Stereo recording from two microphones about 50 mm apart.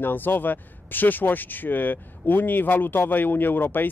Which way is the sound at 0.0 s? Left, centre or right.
Left.